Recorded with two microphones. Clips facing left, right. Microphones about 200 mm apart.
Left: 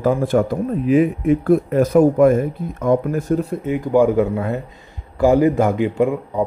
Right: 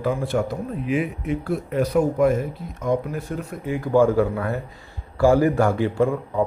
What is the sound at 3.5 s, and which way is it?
A man's voice, 20° left (ahead or behind).